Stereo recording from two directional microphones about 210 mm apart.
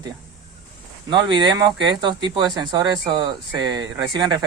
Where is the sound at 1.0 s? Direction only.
20° right (ahead or behind).